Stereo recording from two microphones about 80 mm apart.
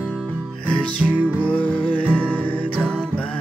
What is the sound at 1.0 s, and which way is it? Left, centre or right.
Music, centre.